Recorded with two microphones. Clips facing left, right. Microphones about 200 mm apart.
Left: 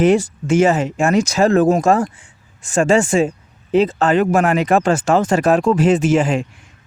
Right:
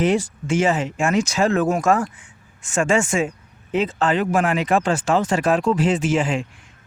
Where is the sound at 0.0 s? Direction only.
45° left (ahead or behind).